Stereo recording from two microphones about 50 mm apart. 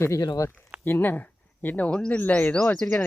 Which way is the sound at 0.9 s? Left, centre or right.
Left.